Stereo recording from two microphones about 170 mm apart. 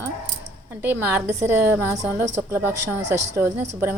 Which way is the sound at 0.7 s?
15° right (ahead or behind).